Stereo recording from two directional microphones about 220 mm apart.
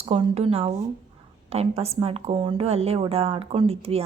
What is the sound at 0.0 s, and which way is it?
A woman's voice, 25° right (ahead or behind).